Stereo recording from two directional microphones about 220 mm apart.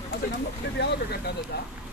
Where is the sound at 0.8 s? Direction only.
50° left (ahead or behind).